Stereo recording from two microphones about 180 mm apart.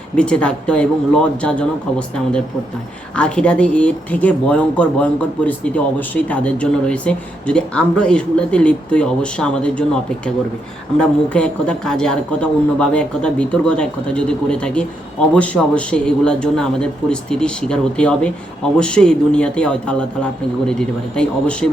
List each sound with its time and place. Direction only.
0.2 s speech: 5° left (ahead or behind)